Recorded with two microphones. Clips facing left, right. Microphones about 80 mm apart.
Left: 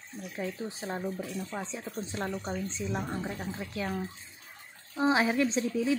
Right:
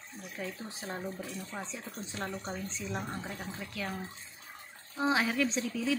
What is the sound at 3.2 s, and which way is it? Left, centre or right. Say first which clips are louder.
Speech: left 4 dB; left.